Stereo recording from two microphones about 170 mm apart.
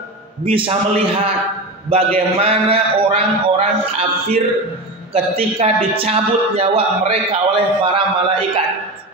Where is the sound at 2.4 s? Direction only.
35° right (ahead or behind).